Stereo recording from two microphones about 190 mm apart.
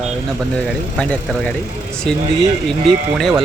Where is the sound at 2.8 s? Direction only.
Centre (ahead or behind).